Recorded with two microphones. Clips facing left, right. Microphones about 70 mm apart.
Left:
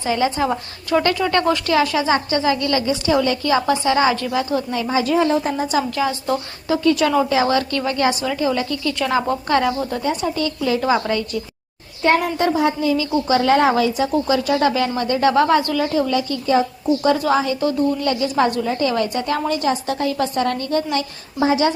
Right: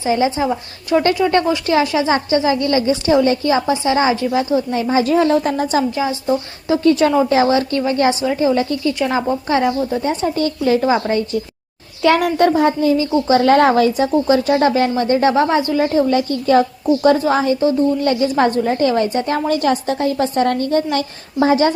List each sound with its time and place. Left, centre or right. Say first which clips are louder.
0.0 s a woman's voice: right 3 dB; centre
4.7 s a woman's voice: right 3 dB; right
5.4 s a woman's voice: right 3 dB; right
5.9 s a woman's voice: right 2 dB; centre
6.8 s a woman's voice: right 3 dB; right; by 9.7 s centre
10.0 s a woman's voice: right 3 dB; right
10.8 s a woman's voice: right 3 dB; right
12.0 s a child's voice: right 4 dB; right
12.5 s a woman's voice: right 4 dB; right
13.4 s a woman's voice: right 4 dB; right
15.8 s a woman's voice: right 4 dB; right